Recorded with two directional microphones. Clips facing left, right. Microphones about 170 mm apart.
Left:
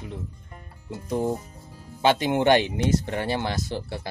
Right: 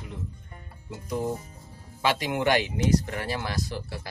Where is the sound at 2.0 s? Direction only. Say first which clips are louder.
Left 5 dB; 25° left (ahead or behind).